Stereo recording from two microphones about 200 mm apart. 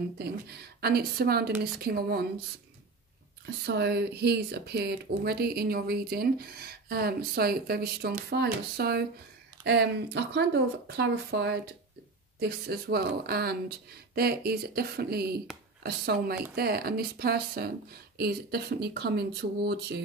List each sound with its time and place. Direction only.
0.7 s speech: 50° right (ahead or behind)
3.4 s speech: 55° right (ahead or behind)